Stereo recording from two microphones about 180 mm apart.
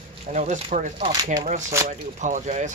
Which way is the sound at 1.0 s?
30° right (ahead or behind).